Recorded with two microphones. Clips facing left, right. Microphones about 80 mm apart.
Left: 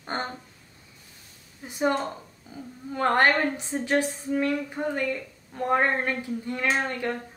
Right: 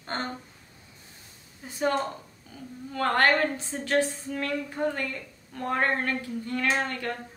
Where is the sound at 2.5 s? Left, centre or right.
Centre.